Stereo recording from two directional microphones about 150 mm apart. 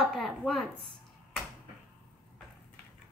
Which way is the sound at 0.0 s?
Centre (ahead or behind).